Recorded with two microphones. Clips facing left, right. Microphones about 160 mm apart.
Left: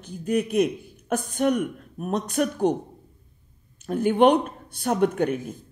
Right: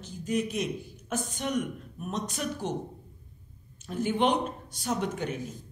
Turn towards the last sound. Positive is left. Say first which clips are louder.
# left 10 dB
turn(degrees=55)  # may be behind; listen again after turning